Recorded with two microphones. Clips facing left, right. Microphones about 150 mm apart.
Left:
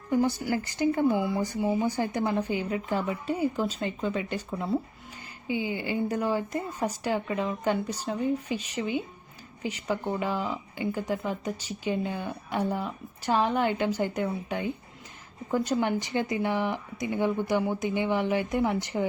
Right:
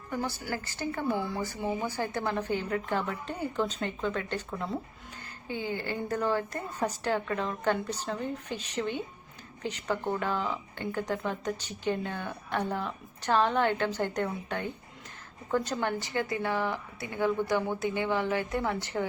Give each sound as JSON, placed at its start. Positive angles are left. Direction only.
{"t": 0.1, "sound": "speech", "side_deg": 15}